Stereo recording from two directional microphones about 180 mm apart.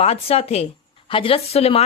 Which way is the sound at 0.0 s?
35° left (ahead or behind).